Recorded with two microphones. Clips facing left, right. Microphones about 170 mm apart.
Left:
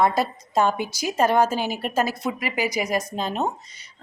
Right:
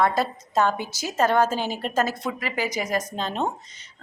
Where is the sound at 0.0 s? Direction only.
15° left (ahead or behind).